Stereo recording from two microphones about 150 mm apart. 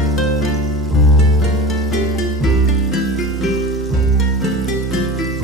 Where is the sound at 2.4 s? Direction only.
Centre (ahead or behind).